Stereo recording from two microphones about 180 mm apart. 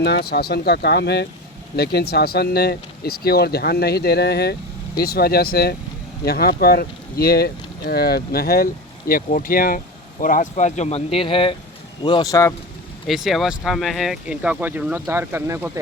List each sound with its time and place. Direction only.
0.0 s speech: 65° left (ahead or behind); by 12.5 s 15° left (ahead or behind)
13.1 s speech: centre (ahead or behind)